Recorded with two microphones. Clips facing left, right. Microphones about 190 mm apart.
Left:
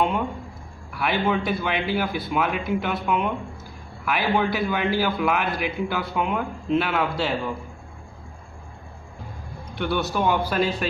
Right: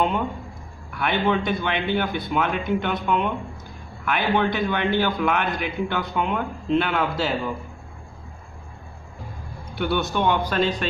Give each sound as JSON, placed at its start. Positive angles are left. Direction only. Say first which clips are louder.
{"t": 0.9, "sound": "a man's voice", "louder": "right 1 dB", "side_deg": 0}
{"t": 9.8, "sound": "a man's voice", "louder": "right 1 dB", "side_deg": 0}